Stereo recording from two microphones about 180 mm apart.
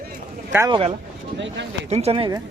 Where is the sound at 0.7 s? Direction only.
30° right (ahead or behind).